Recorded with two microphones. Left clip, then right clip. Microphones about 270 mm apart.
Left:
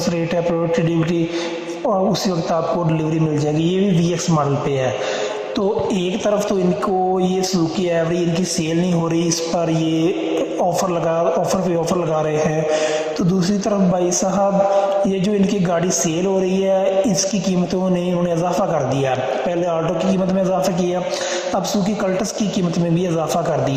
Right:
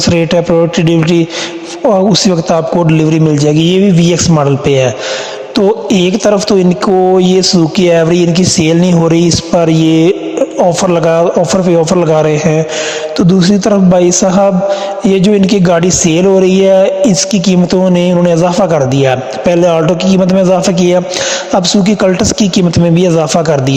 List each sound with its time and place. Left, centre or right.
0.1 s a man's voice: right
2.5 s a man's voice: right
5.9 s speech: right
7.9 s speech: right
22.0 s speech: right